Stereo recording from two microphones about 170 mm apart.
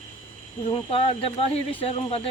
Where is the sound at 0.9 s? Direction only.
35° left (ahead or behind).